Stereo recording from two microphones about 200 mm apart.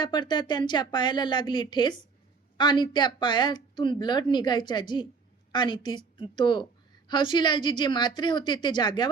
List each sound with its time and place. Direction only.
0.0 s a woman's voice: 20° left (ahead or behind)